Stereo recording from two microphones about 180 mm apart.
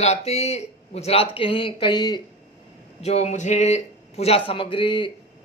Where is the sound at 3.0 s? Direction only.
35° left (ahead or behind).